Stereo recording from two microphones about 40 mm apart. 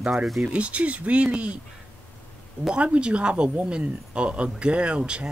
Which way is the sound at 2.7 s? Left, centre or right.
Right.